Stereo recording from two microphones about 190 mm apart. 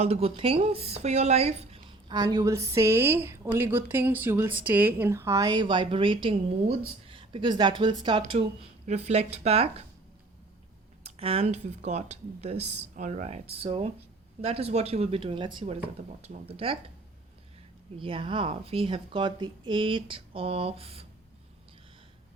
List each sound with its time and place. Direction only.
0.0 s speech: 30° right (ahead or behind)
2.0 s a woman's voice: 20° right (ahead or behind)
11.0 s a woman's voice: 30° right (ahead or behind)
18.0 s a woman's voice: 25° right (ahead or behind)